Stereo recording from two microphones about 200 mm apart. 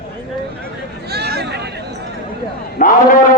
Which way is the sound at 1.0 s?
55° right (ahead or behind).